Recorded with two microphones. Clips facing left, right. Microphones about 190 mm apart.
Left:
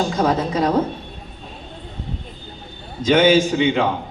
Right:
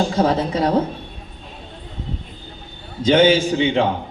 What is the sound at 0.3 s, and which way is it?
Speech, 30° right (ahead or behind).